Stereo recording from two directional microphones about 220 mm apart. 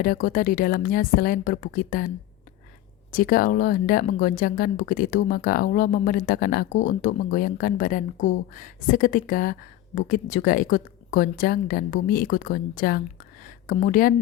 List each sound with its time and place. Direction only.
0.0 s speech: 40° left (ahead or behind)
3.1 s speech: 40° left (ahead or behind)
13.4 s a sound: 40° left (ahead or behind)